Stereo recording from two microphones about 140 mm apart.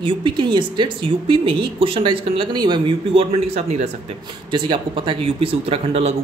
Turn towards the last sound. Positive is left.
turn(degrees=-45)  # may be behind; listen again after turning